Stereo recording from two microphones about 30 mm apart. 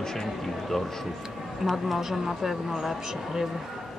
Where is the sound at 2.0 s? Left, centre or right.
Centre.